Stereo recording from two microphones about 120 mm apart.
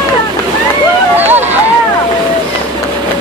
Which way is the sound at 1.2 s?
15° right (ahead or behind).